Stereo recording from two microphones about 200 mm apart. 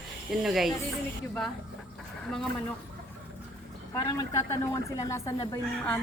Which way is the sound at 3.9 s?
15° left (ahead or behind).